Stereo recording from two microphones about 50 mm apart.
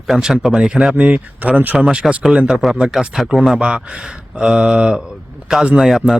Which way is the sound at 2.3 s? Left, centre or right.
Centre.